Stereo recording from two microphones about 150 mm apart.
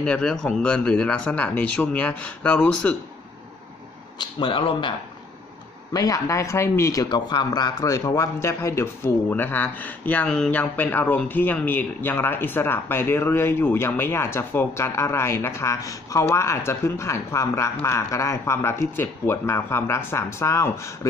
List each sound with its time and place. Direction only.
0.0 s speech: 5° left (ahead or behind)
4.2 s speech: 35° left (ahead or behind)
5.9 s speech: 25° left (ahead or behind)